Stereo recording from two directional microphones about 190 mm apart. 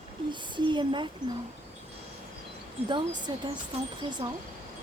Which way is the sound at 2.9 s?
25° right (ahead or behind).